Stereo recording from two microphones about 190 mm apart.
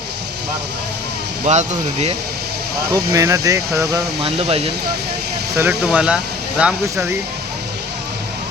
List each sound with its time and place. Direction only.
1.5 s speech: 35° right (ahead or behind)
2.9 s speech: 20° right (ahead or behind)
4.2 s speech: 30° right (ahead or behind)
5.5 s speech: 10° right (ahead or behind)